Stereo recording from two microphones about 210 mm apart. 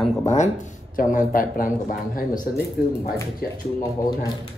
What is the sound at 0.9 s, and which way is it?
A man's voice, 40° left (ahead or behind).